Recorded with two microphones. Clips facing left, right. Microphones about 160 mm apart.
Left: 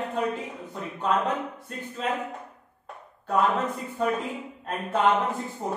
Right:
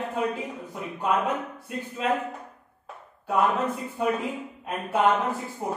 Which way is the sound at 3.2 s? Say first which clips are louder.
Even; centre (ahead or behind).